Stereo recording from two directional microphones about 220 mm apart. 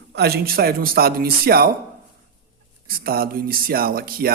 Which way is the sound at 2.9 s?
40° right (ahead or behind).